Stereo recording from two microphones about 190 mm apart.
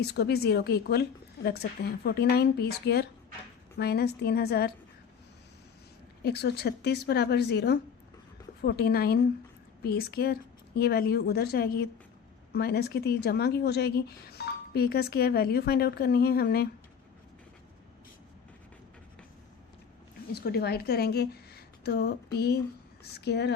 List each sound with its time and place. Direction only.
0.0 s a woman's voice: 60° left (ahead or behind)
6.2 s a woman's voice: 60° left (ahead or behind)
20.3 s a woman's voice: 55° left (ahead or behind)